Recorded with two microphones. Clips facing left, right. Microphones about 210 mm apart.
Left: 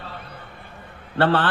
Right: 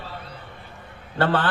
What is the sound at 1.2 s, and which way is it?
Speech, 45° right (ahead or behind).